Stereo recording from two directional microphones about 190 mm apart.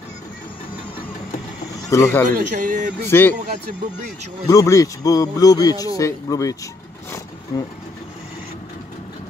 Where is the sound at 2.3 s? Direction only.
45° right (ahead or behind).